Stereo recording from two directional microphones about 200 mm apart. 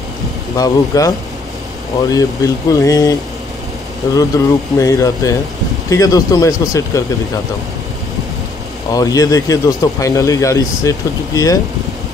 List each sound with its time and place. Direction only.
0.6 s a man's voice: 15° left (ahead or behind)
4.3 s a man's voice: 15° left (ahead or behind)
8.9 s a man's voice: 15° left (ahead or behind)